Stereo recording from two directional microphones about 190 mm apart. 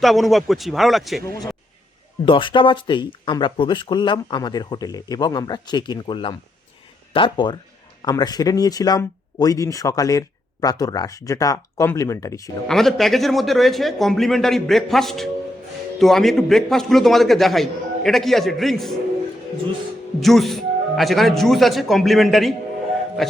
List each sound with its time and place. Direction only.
0.0 s a man's voice: centre (ahead or behind)
2.2 s speech: 25° left (ahead or behind)
12.6 s a man's voice: centre (ahead or behind)
20.1 s a man's voice: centre (ahead or behind)